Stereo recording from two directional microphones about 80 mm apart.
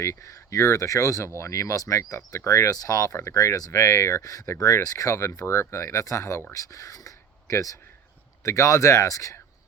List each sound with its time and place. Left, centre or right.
0.0 s speech: left